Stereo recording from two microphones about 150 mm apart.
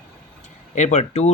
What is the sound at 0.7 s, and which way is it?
Speech, 50° left (ahead or behind).